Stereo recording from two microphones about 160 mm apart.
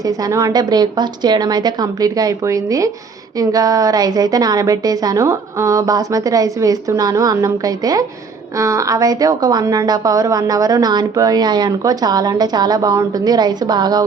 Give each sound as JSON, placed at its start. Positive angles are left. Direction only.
{"t": 0.0, "sound": "a woman's voice", "side_deg": -20}